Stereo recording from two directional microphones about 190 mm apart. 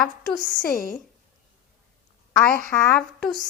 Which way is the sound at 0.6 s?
50° left (ahead or behind).